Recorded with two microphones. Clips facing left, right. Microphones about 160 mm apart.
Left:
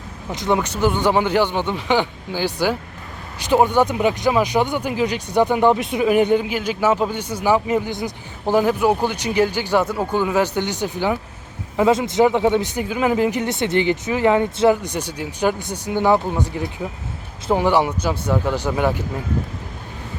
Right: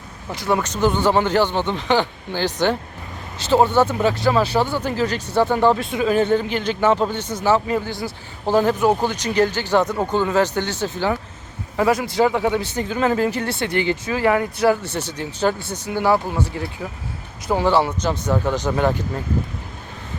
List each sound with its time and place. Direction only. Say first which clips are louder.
0.3 s speech: left 1 dB; 20° left (ahead or behind)